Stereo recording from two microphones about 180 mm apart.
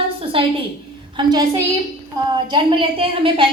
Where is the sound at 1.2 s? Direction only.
25° right (ahead or behind).